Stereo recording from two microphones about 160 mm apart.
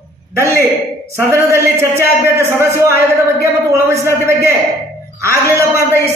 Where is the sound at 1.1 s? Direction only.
15° right (ahead or behind).